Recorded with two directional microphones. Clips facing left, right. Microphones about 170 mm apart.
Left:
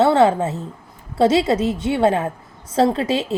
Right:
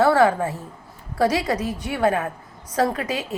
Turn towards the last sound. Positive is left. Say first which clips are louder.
# left 5 dB
turn(degrees=25)  # may be behind; listen again after turning